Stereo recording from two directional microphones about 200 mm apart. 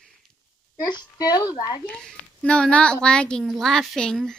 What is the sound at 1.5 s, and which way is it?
Speech, 20° left (ahead or behind).